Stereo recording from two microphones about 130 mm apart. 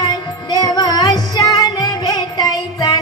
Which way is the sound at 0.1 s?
30° left (ahead or behind).